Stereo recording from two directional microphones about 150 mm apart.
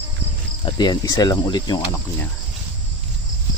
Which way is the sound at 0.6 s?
30° left (ahead or behind).